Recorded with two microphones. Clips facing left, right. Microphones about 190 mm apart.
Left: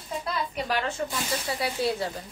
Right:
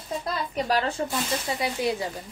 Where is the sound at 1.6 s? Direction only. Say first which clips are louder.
Even; 15° right (ahead or behind).